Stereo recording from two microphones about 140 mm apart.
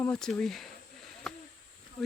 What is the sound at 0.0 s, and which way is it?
Speech, 5° left (ahead or behind).